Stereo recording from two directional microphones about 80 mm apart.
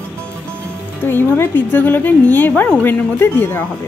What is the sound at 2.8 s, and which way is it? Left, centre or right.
Speech, left.